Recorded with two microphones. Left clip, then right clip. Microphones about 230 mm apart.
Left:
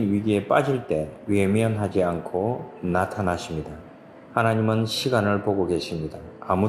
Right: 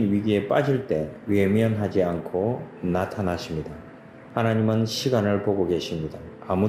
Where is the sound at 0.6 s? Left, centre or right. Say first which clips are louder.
Left 1 dB; left.